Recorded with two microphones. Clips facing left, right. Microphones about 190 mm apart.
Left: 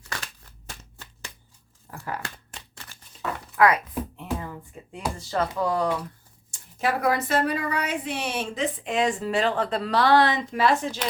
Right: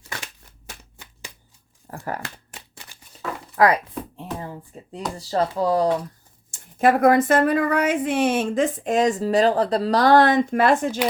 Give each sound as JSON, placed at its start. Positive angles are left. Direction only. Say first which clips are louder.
{"t": 0.8, "sound": "a sound", "louder": "right 1 dB", "side_deg": -15}
{"t": 1.9, "sound": "speech", "louder": "right 4 dB", "side_deg": -45}
{"t": 2.6, "sound": "shuffling cards", "louder": "right 1 dB", "side_deg": -10}
{"t": 3.5, "sound": "speech", "louder": "right 2 dB", "side_deg": -35}
{"t": 4.2, "sound": "a sound", "louder": "even", "side_deg": -30}
{"t": 5.1, "sound": "speech", "louder": "right 5 dB", "side_deg": -35}
{"t": 6.5, "sound": "speech", "louder": "right 8 dB", "side_deg": -50}